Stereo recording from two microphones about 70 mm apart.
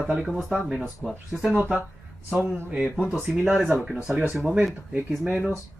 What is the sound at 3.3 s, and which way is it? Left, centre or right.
Speech, centre.